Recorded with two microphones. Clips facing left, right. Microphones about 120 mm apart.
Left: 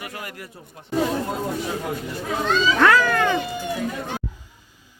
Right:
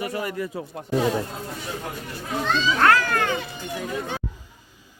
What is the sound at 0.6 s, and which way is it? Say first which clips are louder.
Speech: right 12 dB; 90° right.